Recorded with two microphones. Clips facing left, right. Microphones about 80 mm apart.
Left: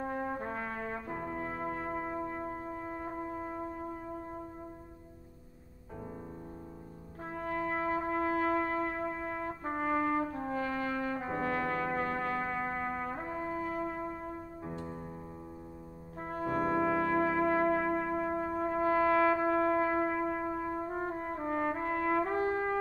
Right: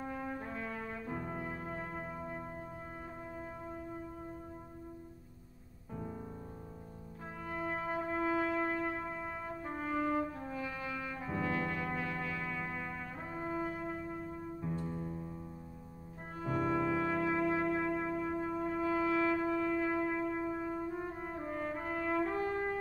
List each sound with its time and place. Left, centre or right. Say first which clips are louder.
0.0 s brass instrument: left 5 dB; left
7.3 s music: left 5 dB; left
14.9 s music: right 2 dB; left
16.3 s brass instrument: left 3 dB; left